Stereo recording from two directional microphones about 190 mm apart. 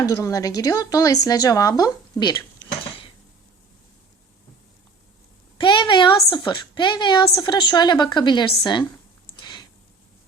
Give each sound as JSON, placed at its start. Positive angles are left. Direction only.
{"t": 0.0, "sound": "a woman's voice", "side_deg": 15}
{"t": 5.5, "sound": "a woman's voice", "side_deg": 25}
{"t": 9.4, "sound": "a sound", "side_deg": 25}